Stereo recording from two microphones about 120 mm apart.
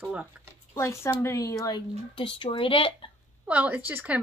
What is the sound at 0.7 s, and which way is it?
Speech, 25° left (ahead or behind).